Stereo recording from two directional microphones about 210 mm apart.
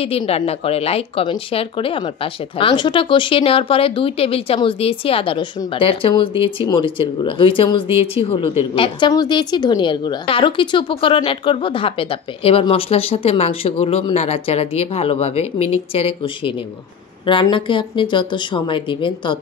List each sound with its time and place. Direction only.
0.0 s speech: 30° left (ahead or behind)